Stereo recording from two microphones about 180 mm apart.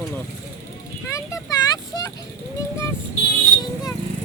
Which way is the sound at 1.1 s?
20° left (ahead or behind).